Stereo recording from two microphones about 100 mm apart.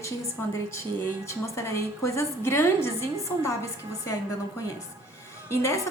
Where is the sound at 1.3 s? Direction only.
30° left (ahead or behind).